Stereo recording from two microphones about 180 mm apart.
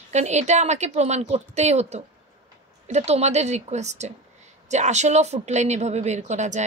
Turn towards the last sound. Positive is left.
turn(degrees=-40)  # may be behind; listen again after turning